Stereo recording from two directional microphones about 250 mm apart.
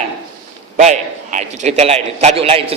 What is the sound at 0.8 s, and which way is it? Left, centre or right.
A man's voice, right.